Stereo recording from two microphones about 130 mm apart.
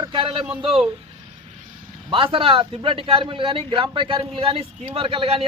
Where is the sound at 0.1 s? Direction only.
40° right (ahead or behind).